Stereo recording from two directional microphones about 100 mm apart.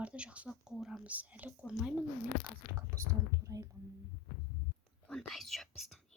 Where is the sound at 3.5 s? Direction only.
35° right (ahead or behind).